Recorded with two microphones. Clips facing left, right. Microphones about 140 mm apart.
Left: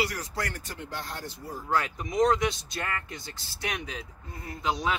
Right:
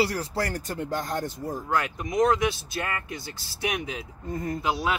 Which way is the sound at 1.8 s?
Centre (ahead or behind).